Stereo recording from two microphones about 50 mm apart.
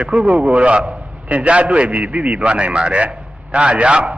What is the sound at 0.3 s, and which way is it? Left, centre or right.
A man's voice, right.